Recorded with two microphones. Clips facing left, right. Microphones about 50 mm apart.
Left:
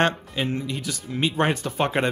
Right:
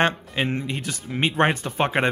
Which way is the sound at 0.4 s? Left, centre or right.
Right.